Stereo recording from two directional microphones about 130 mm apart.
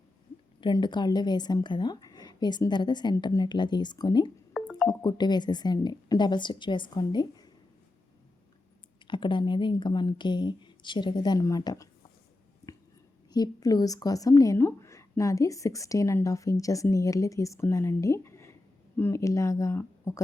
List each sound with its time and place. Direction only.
0.6 s a woman's voice: 35° left (ahead or behind)
4.6 s a sound: 5° right (ahead or behind)
4.9 s a woman's voice: 30° left (ahead or behind)
9.0 s a woman's voice: 35° left (ahead or behind)
13.3 s a woman's voice: 30° left (ahead or behind)